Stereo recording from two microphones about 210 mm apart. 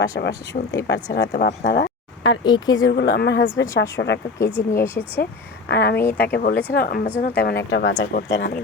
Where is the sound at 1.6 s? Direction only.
55° left (ahead or behind).